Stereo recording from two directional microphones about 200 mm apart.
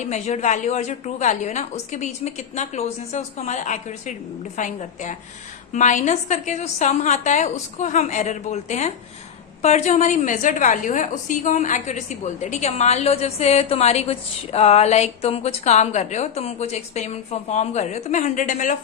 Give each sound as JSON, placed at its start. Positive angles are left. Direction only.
{"t": 0.0, "sound": "a woman's voice", "side_deg": 35}